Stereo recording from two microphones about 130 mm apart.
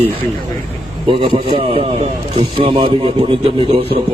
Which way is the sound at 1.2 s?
45° right (ahead or behind).